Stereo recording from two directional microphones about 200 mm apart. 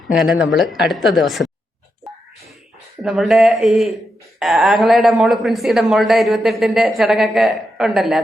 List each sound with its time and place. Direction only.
0.1 s speech: centre (ahead or behind)
3.0 s speech: centre (ahead or behind)